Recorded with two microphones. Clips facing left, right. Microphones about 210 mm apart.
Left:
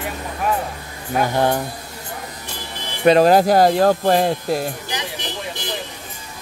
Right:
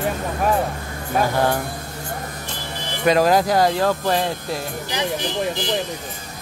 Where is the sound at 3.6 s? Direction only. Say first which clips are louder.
Left 4 dB; 45° left (ahead or behind).